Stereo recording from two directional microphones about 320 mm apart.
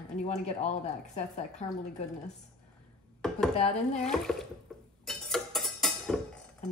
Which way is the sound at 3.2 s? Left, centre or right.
Centre.